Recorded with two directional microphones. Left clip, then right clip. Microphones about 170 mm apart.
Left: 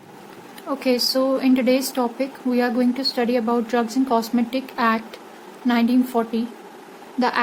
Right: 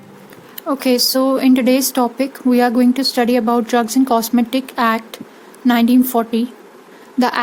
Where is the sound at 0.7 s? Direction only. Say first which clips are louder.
Right 5 dB; 50° right (ahead or behind).